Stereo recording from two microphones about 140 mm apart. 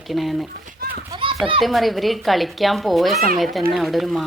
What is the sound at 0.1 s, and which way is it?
Speech, centre (ahead or behind).